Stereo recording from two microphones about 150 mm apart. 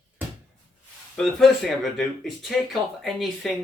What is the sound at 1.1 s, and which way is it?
Speech, 5° left (ahead or behind).